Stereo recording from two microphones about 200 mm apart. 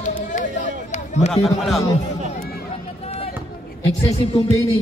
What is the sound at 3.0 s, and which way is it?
Basketball bounce, 30° left (ahead or behind).